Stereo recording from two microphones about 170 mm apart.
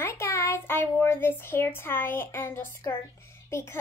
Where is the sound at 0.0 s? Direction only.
15° left (ahead or behind).